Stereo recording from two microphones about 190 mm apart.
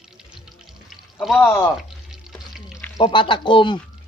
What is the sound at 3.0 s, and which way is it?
Speech, 25° left (ahead or behind).